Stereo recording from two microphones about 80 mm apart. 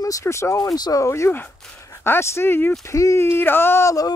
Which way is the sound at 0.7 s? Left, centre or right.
Left.